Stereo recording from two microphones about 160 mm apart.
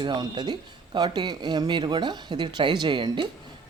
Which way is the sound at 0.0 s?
25° right (ahead or behind).